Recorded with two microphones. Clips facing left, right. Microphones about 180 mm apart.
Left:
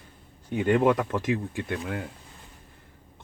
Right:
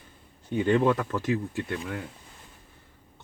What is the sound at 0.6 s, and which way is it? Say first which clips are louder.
Speech: left 2 dB; 20° left (ahead or behind).